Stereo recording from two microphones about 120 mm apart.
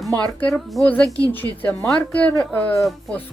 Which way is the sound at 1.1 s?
15° left (ahead or behind).